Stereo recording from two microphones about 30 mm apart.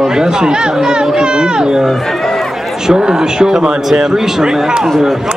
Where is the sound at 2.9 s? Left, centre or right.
Right.